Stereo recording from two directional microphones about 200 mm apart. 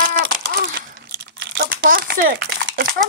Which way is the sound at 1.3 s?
50° right (ahead or behind).